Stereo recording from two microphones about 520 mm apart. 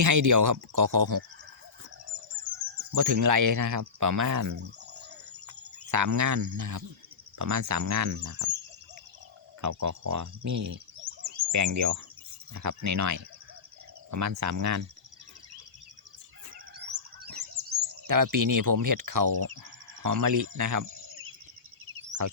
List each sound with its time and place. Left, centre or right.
0.0 s speech: right
2.9 s speech: right
9.6 s cricket: right
12.5 s speech: right
16.7 s chirp: centre
18.0 s speech: right